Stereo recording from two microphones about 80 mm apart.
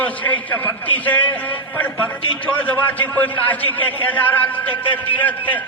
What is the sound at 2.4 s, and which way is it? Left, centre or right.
A man's voice, centre.